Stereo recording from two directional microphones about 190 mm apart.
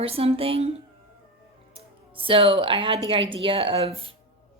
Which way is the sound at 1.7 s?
30° right (ahead or behind).